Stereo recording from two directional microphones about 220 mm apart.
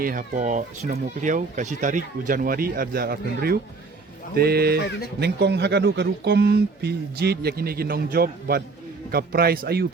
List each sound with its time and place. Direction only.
0.0 s speech: 40° right (ahead or behind)